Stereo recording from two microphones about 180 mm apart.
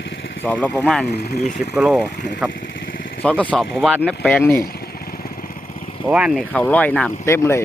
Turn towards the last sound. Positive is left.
turn(degrees=15)  # may be behind; listen again after turning